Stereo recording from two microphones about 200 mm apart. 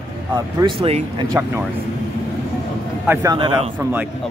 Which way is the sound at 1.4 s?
10° right (ahead or behind).